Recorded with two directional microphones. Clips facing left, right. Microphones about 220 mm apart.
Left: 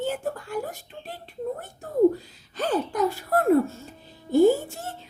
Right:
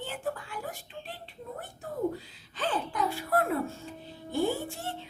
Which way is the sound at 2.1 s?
40° left (ahead or behind).